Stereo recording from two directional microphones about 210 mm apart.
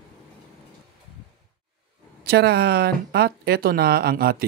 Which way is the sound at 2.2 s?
50° right (ahead or behind).